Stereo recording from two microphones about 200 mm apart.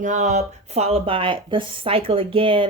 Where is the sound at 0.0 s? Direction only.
35° right (ahead or behind).